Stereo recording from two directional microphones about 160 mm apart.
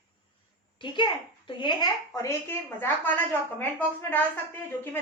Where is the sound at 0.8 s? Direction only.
30° left (ahead or behind); by 3.1 s 15° left (ahead or behind).